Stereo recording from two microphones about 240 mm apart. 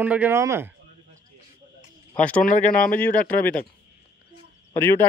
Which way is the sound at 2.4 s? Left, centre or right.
Left.